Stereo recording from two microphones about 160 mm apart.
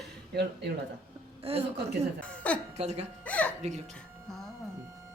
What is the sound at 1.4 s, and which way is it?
Speech, 40° right (ahead or behind).